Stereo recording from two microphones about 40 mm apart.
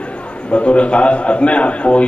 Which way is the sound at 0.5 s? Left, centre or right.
Left.